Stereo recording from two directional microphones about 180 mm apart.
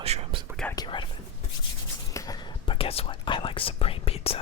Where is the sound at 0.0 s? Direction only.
35° right (ahead or behind).